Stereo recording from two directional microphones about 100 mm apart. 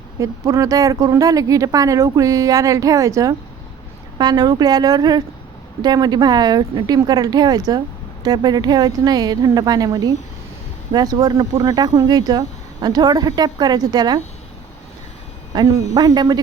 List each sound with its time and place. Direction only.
0.2 s speech: 30° right (ahead or behind)
4.2 s speech: 45° right (ahead or behind)
15.5 s speech: 35° right (ahead or behind)